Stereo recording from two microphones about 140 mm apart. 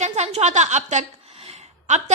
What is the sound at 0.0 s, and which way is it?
A woman's voice, 50° right (ahead or behind).